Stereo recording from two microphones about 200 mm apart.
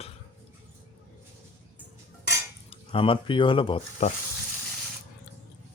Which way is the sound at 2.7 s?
25° left (ahead or behind).